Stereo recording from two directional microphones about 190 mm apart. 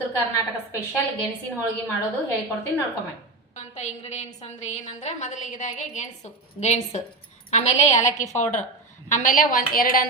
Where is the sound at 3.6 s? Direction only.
40° left (ahead or behind).